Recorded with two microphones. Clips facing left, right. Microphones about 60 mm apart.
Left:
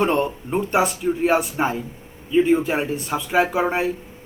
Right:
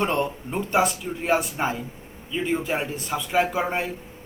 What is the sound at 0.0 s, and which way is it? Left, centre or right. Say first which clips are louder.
Speech: left 4 dB; centre.